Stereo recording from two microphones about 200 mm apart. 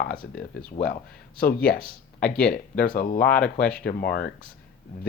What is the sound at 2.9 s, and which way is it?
Speech, 45° left (ahead or behind).